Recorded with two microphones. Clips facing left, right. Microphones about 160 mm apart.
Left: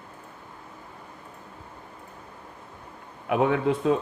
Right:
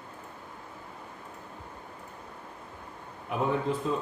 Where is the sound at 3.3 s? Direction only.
75° left (ahead or behind).